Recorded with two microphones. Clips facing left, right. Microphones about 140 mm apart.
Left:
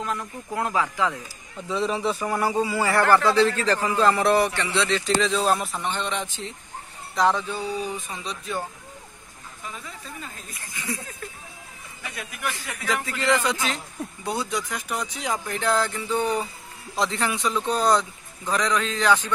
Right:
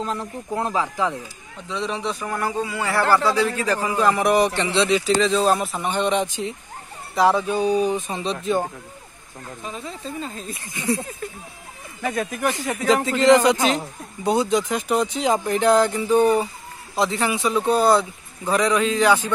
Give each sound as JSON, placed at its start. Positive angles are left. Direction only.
{"t": 0.0, "sound": "speech", "side_deg": -30}
{"t": 1.7, "sound": "a man's voice", "side_deg": 5}
{"t": 5.2, "sound": "a man's voice", "side_deg": 0}
{"t": 5.9, "sound": "a man's voice", "side_deg": -15}
{"t": 9.7, "sound": "speech", "side_deg": -25}
{"t": 12.0, "sound": "speech", "side_deg": -45}
{"t": 12.8, "sound": "a man's voice", "side_deg": -25}